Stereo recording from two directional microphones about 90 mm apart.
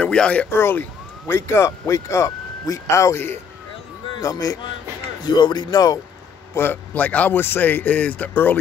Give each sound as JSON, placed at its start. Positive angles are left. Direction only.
{"t": 0.0, "sound": "speech", "side_deg": 10}
{"t": 0.5, "sound": "speech", "side_deg": 25}
{"t": 5.2, "sound": "speech", "side_deg": 55}
{"t": 6.5, "sound": "a man's voice", "side_deg": 25}